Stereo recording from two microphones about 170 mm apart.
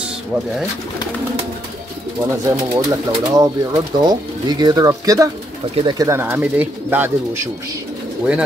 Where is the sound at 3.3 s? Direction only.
25° right (ahead or behind).